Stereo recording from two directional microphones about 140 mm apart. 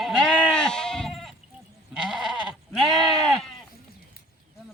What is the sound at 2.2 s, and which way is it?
Goat, centre (ahead or behind).